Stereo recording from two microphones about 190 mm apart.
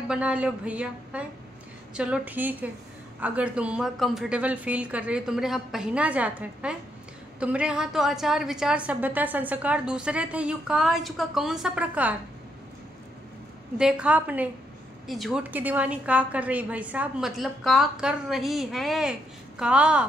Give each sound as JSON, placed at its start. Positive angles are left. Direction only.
{"t": 0.1, "sound": "a woman's voice", "side_deg": -5}
{"t": 13.7, "sound": "a woman's voice", "side_deg": -5}